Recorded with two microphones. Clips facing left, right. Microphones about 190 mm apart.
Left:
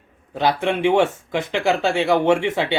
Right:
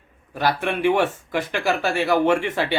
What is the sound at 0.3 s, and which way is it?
Speech, 20° left (ahead or behind).